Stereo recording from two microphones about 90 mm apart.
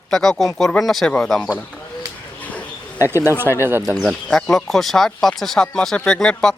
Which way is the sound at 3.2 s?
25° right (ahead or behind).